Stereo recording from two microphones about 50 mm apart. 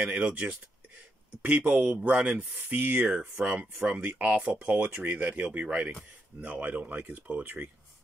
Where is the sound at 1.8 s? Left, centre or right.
Centre.